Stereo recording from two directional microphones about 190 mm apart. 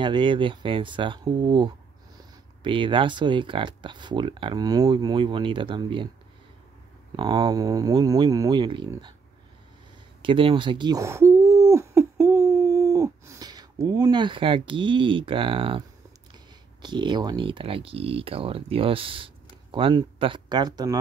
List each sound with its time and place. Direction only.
0.0 s speech: 25° right (ahead or behind)
7.2 s speech: 25° right (ahead or behind)
10.2 s hoot: 30° right (ahead or behind)
16.8 s speech: 25° right (ahead or behind)